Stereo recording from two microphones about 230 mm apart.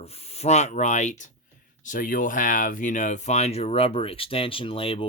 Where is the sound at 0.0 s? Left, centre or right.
Left.